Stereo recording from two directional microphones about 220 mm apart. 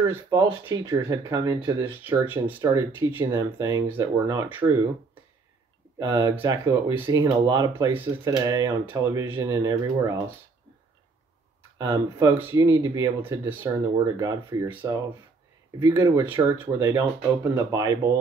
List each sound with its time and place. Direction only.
0.0 s speech: 15° right (ahead or behind)
5.9 s speech: 15° right (ahead or behind)
11.8 s speech: 15° right (ahead or behind)